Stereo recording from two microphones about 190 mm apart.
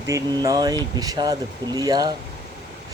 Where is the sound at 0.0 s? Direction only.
20° right (ahead or behind).